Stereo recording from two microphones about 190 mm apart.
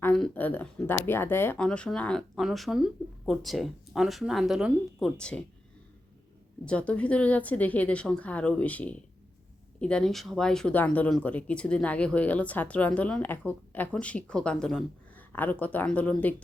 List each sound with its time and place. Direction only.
0.0 s speech: 5° left (ahead or behind)
6.7 s speech: 5° left (ahead or behind)